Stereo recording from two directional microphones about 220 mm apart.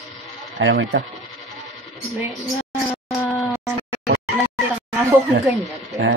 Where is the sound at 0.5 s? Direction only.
50° right (ahead or behind).